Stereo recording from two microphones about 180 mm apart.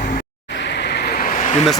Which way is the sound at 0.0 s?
55° left (ahead or behind).